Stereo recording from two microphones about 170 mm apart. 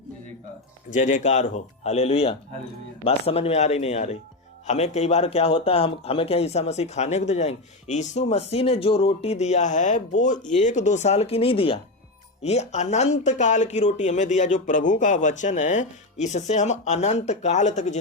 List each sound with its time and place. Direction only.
0.9 s speech: 45° left (ahead or behind)